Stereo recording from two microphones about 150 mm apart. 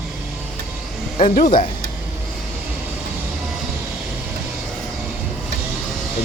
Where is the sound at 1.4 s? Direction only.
65° left (ahead or behind).